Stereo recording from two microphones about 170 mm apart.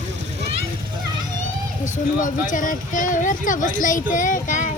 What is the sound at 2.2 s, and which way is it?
Speech, 50° left (ahead or behind).